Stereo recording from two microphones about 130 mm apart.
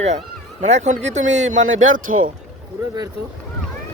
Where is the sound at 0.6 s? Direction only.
65° right (ahead or behind); by 2.3 s 90° right.